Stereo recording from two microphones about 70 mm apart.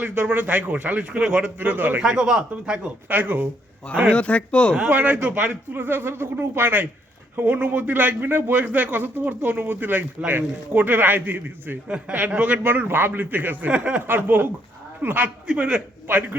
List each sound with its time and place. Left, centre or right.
0.0 s a man's voice: right
1.5 s a man's voice: right
2.0 s speech: centre
3.1 s a man's voice: right
4.1 s speech: centre
4.9 s a man's voice: right
11.9 s a man's voice: centre
15.4 s speech: centre